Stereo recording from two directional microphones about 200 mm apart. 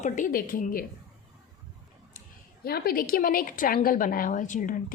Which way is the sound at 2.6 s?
50° left (ahead or behind).